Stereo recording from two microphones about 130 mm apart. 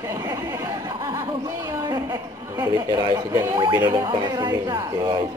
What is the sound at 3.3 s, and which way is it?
Speech, 30° right (ahead or behind).